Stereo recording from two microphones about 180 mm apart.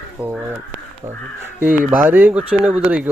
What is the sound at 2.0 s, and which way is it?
Speech, 10° right (ahead or behind).